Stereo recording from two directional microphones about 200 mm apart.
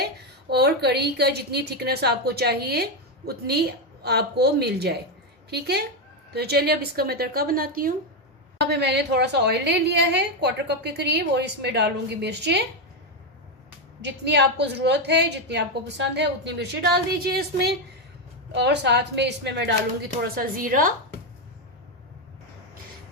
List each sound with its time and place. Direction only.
0.5 s a woman's voice: 55° right (ahead or behind)
14.0 s a woman's voice: 60° right (ahead or behind)
20.3 s a woman's voice: 45° right (ahead or behind)